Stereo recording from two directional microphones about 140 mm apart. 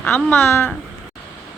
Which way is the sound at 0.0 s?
15° left (ahead or behind).